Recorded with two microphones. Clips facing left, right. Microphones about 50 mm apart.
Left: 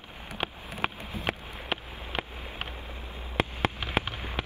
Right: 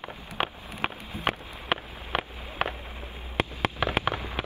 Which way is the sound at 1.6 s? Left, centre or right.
Right.